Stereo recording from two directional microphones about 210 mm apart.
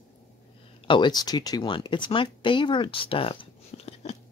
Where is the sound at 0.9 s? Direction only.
20° left (ahead or behind).